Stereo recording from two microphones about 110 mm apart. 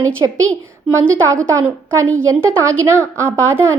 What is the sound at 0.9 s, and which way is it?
A woman's voice, 25° right (ahead or behind).